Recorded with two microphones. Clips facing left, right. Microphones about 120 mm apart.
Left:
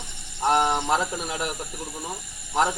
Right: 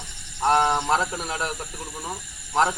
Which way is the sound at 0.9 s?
10° left (ahead or behind).